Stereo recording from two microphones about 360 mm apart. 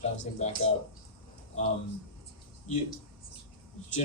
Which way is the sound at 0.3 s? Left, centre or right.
Centre.